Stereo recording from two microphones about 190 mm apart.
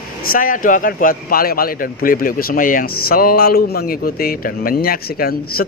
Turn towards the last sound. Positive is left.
turn(degrees=50)  # may be behind; listen again after turning